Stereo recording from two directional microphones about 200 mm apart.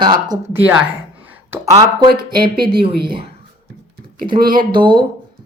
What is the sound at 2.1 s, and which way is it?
Speech, 50° right (ahead or behind).